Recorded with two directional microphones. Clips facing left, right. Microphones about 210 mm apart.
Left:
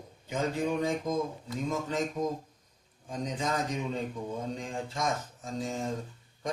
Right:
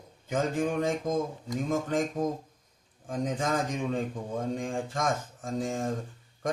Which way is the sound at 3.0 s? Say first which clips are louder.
Right 3 dB; 50° right (ahead or behind).